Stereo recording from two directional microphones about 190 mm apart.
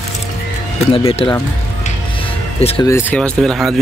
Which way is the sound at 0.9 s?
30° left (ahead or behind).